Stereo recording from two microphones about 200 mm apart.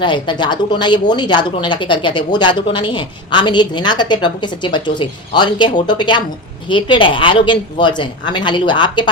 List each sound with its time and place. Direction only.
0.0 s a woman's voice: 25° left (ahead or behind)